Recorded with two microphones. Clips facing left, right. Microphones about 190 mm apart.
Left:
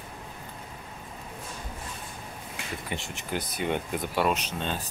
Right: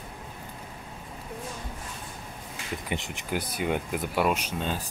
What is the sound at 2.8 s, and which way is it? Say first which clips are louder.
Speech: right 2 dB; 15° right (ahead or behind).